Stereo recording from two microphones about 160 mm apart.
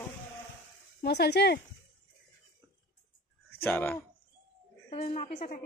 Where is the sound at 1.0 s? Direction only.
90° left.